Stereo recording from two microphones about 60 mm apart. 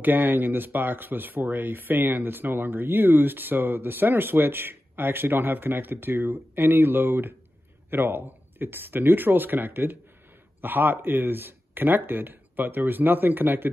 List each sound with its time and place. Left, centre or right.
0.0 s speech: right